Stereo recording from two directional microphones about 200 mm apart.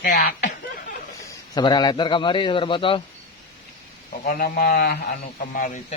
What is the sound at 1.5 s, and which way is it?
A man's voice, 20° left (ahead or behind).